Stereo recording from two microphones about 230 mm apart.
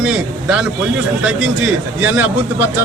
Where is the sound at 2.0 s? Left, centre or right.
Centre.